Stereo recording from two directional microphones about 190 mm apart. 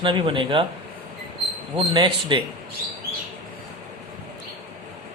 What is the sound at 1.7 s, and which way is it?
Speech, 25° right (ahead or behind).